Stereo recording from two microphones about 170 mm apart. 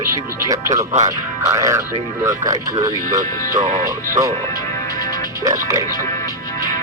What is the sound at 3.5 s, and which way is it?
Speech, 45° right (ahead or behind).